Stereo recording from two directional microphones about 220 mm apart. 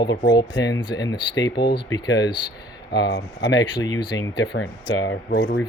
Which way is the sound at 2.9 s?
50° left (ahead or behind).